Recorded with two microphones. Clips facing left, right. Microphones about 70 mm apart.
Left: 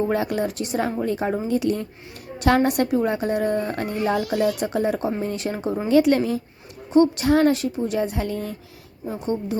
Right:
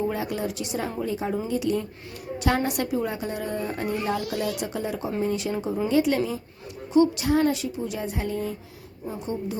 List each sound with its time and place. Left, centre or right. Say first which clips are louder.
0.1 s a woman's voice: left 5 dB; left